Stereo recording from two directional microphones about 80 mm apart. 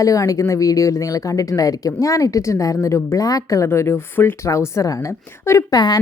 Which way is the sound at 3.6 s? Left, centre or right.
Left.